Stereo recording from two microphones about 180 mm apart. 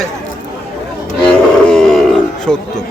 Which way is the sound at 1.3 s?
5° left (ahead or behind).